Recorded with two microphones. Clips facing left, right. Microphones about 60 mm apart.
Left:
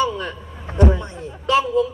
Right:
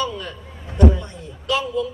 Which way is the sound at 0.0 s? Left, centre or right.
Left.